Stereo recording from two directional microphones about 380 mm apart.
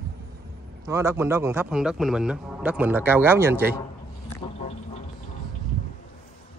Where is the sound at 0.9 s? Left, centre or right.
Centre.